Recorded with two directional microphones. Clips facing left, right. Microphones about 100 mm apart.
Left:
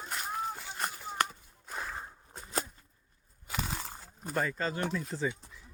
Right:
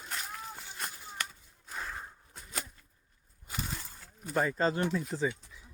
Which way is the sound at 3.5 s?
90° left.